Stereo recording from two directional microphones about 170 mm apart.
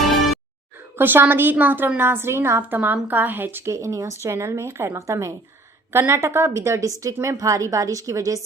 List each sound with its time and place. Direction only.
0.0 s music: centre (ahead or behind)
0.9 s a woman's voice: 10° right (ahead or behind)